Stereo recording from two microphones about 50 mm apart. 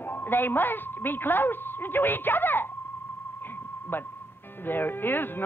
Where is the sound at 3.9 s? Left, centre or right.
Left.